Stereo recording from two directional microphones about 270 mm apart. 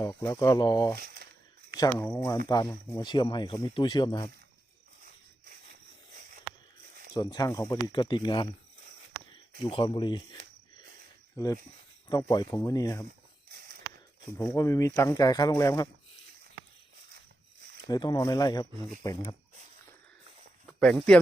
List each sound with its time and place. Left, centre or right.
0.0 s speech: centre
0.9 s a sound: right
1.7 s speech: centre
7.1 s speech: centre
9.6 s speech: centre
12.0 s speech: centre
14.3 s speech: centre
17.8 s speech: centre
20.7 s speech: centre